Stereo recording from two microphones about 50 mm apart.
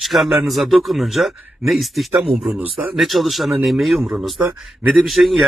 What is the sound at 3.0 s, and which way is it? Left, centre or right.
Speech, centre.